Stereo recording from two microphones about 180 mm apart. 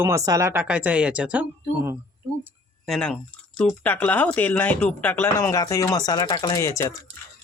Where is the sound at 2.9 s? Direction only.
5° left (ahead or behind).